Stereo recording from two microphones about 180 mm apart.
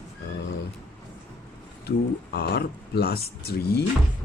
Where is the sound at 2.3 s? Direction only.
65° left (ahead or behind).